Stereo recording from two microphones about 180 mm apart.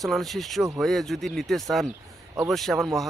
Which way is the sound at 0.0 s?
Centre (ahead or behind).